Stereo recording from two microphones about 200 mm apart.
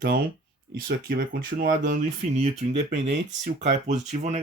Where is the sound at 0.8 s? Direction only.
45° right (ahead or behind).